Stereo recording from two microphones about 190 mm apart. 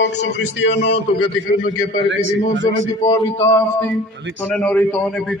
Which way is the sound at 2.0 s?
80° right.